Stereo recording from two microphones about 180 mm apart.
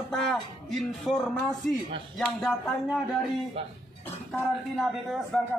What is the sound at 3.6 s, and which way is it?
Speech, 35° right (ahead or behind).